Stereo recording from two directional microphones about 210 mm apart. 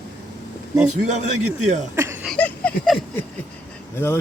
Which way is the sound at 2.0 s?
10° right (ahead or behind).